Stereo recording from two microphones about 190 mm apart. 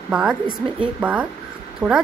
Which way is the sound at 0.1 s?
5° right (ahead or behind).